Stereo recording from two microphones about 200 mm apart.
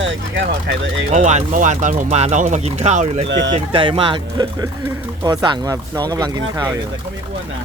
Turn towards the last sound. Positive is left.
turn(degrees=-20)  # may be behind; listen again after turning